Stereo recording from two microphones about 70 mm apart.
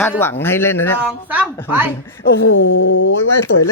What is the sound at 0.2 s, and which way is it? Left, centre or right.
Speech, left.